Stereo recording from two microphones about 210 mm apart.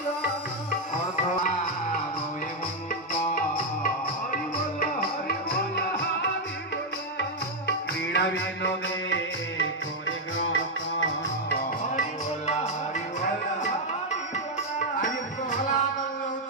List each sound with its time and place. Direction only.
7.2 s music: 55° left (ahead or behind)
15.5 s music: 35° left (ahead or behind)